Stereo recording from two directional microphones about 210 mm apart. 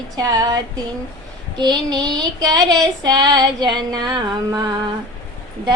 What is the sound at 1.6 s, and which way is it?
Child singing, 20° right (ahead or behind).